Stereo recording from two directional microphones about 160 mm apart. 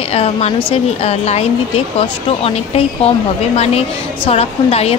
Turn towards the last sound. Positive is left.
turn(degrees=40)  # may be behind; listen again after turning